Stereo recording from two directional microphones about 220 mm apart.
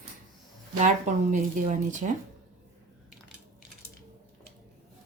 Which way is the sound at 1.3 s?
35° right (ahead or behind).